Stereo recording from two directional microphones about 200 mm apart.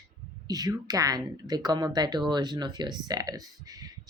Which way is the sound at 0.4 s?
20° right (ahead or behind).